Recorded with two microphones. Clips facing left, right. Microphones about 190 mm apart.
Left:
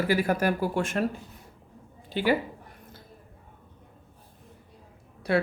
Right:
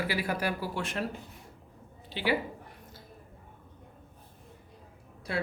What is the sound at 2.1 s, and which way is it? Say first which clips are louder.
Speech: left 5 dB; 45° left (ahead or behind).